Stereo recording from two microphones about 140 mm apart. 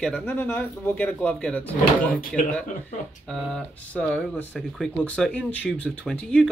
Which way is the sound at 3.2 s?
Centre (ahead or behind).